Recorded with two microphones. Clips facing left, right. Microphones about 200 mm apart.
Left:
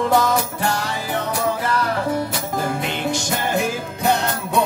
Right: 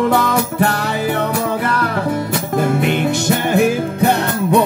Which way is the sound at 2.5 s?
65° right (ahead or behind).